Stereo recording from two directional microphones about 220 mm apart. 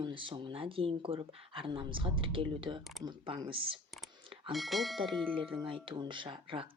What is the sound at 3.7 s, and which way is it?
Clicking, centre (ahead or behind).